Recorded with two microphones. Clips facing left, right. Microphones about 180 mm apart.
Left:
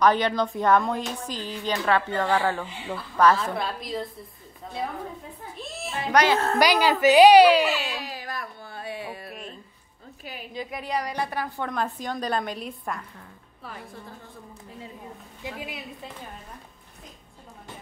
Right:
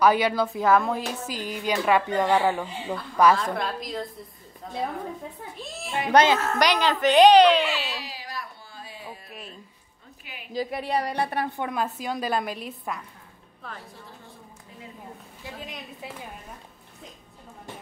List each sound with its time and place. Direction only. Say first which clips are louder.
0.0 s a woman's voice: right 1 dB; 10° right (ahead or behind)
2.6 s a woman's voice: right 2 dB; 5° left (ahead or behind)
5.6 s music: left 1 dB; centre (ahead or behind)
5.9 s a woman's voice: right 2 dB; 25° right (ahead or behind)
6.3 s a woman's voice: left 1 dB; 30° left (ahead or behind)
6.6 s a woman's voice: left 4 dB; 5° left (ahead or behind)
8.0 s music: left 3 dB; 50° left (ahead or behind); by 9.3 s 70° left (ahead or behind)
10.5 s a woman's voice: right 4 dB; 35° right (ahead or behind)
11.6 s a woman's voice: right 1 dB; 5° right (ahead or behind)
15.4 s a woman's voice: left 3 dB; 10° left (ahead or behind)